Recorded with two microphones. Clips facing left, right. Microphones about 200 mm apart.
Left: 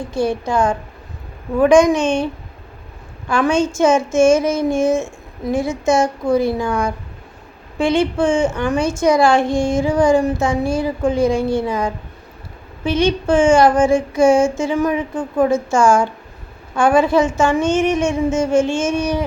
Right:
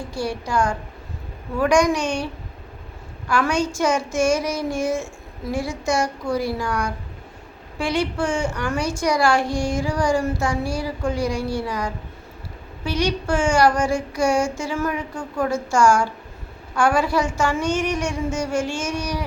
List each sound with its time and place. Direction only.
0.1 s a woman's voice: 20° left (ahead or behind)